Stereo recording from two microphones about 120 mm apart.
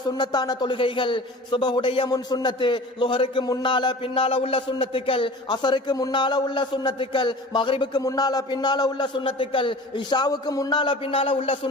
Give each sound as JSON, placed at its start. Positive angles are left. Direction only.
{"t": 0.0, "sound": "a man's voice", "side_deg": 35}